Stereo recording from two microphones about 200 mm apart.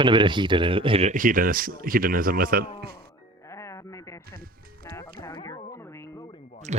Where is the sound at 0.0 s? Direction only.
25° right (ahead or behind); by 3.1 s 50° right (ahead or behind).